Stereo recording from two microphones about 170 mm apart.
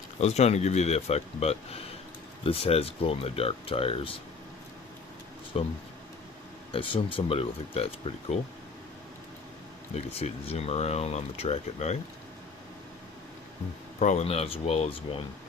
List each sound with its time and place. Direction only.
0.2 s speech: 40° left (ahead or behind)
5.5 s speech: 35° left (ahead or behind)
9.9 s speech: 35° left (ahead or behind)
14.0 s speech: 45° left (ahead or behind)